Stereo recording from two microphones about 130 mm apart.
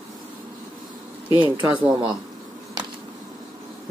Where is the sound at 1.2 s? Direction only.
40° left (ahead or behind).